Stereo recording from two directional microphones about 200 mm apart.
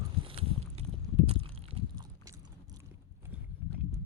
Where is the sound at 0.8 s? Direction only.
30° right (ahead or behind).